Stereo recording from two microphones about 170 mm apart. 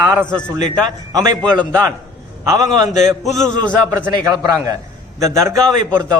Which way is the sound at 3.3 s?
5° left (ahead or behind).